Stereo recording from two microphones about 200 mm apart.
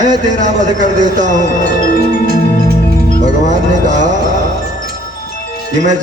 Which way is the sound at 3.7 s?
40° right (ahead or behind).